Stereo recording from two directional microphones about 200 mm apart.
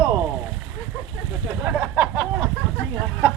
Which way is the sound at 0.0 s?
15° right (ahead or behind).